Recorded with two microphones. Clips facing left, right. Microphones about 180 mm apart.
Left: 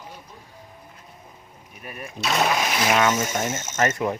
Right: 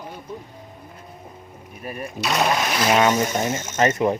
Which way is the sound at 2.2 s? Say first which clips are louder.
Right 1 dB; centre (ahead or behind).